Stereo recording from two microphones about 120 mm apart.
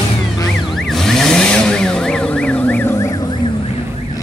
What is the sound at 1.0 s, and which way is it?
Car, 5° left (ahead or behind).